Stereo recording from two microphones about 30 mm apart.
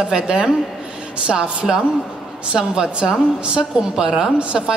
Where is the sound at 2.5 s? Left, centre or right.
Right.